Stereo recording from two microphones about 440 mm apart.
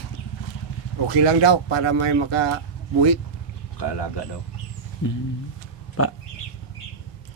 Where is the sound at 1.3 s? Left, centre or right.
Right.